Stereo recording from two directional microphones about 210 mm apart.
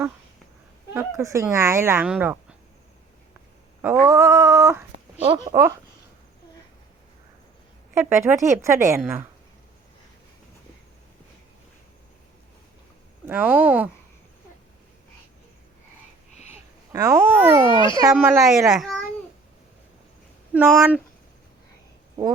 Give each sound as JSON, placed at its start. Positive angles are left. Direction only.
{"t": 0.9, "sound": "speech", "side_deg": -15}
{"t": 3.8, "sound": "a sound", "side_deg": -10}
{"t": 5.2, "sound": "speech", "side_deg": -20}
{"t": 7.9, "sound": "speech", "side_deg": -10}
{"t": 13.2, "sound": "speech", "side_deg": -5}
{"t": 16.9, "sound": "speech", "side_deg": -15}
{"t": 17.7, "sound": "a child's voice", "side_deg": 25}
{"t": 18.1, "sound": "a woman's voice", "side_deg": -5}
{"t": 20.5, "sound": "speech", "side_deg": -5}